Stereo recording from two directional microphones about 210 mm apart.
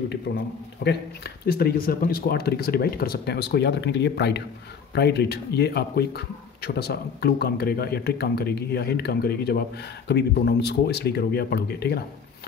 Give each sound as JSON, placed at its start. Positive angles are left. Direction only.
{"t": 0.3, "sound": "a man's voice", "side_deg": 60}
{"t": 0.8, "sound": "speech", "side_deg": 50}